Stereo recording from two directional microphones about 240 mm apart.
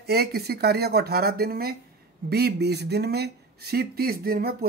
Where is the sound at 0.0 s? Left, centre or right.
Right.